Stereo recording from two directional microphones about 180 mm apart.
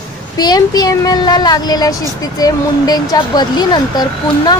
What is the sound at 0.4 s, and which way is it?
Speech, 20° left (ahead or behind).